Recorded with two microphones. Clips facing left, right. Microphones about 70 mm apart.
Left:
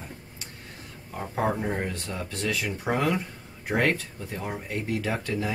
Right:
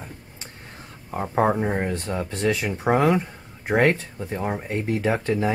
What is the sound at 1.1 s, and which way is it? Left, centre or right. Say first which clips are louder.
Speech: right 6 dB; right.